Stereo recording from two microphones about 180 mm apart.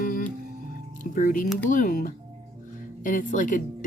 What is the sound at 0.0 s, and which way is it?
Music, 50° left (ahead or behind).